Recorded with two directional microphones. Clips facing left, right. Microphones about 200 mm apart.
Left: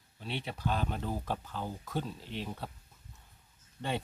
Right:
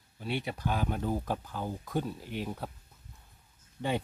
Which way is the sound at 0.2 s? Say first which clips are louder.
Right 3 dB; 10° right (ahead or behind).